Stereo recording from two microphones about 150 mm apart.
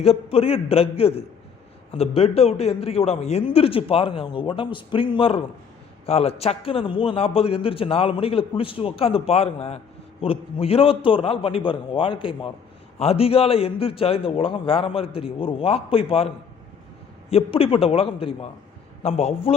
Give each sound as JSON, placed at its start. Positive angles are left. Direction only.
{"t": 0.0, "sound": "a man's voice", "side_deg": 40}